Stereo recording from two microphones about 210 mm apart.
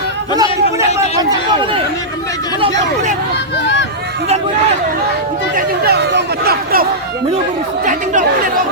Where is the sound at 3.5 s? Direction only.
55° left (ahead or behind).